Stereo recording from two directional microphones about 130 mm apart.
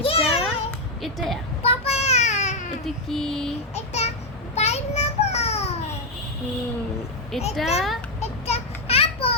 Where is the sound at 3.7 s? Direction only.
55° left (ahead or behind).